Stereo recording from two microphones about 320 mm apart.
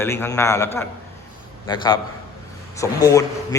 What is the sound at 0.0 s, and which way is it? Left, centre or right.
A man's voice, centre.